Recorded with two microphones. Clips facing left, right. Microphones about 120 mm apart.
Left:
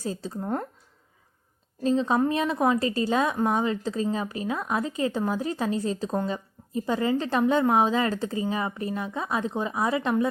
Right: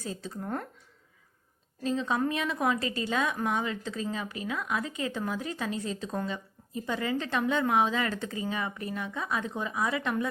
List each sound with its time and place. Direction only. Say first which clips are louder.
0.0 s a woman's voice: left 5 dB; 35° left (ahead or behind)
1.8 s a woman's voice: left 6 dB; 35° left (ahead or behind)